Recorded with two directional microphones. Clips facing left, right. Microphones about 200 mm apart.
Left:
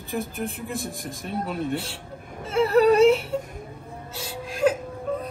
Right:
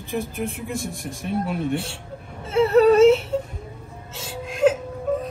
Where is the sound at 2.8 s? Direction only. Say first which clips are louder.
Right 3 dB; centre (ahead or behind).